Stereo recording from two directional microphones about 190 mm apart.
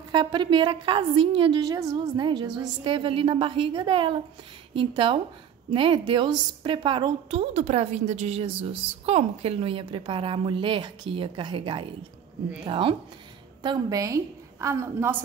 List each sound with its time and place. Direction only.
0.1 s a woman's voice: 25° right (ahead or behind)